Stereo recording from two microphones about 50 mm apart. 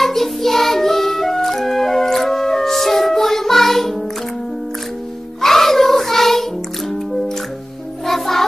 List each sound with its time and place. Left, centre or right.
0.0 s music: centre
5.4 s child singing: centre
8.1 s music: centre